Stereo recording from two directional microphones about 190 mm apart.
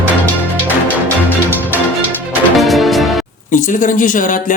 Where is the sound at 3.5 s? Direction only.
45° left (ahead or behind).